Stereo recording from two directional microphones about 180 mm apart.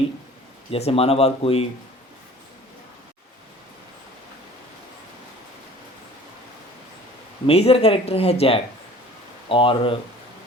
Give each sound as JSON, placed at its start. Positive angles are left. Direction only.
{"t": 0.7, "sound": "speech", "side_deg": 35}
{"t": 7.4, "sound": "speech", "side_deg": 35}